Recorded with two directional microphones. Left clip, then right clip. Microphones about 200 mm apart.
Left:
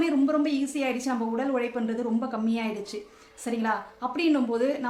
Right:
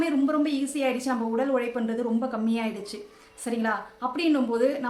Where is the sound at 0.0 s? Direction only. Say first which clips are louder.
Even; 5° right (ahead or behind).